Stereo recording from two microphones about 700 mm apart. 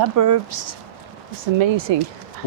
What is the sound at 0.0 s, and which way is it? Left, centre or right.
Speech, right.